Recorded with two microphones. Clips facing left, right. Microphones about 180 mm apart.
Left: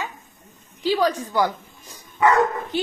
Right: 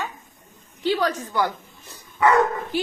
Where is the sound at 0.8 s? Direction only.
10° left (ahead or behind).